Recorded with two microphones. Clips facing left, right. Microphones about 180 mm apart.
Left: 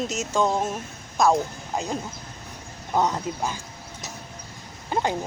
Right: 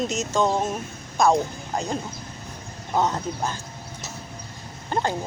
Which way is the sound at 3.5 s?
10° left (ahead or behind).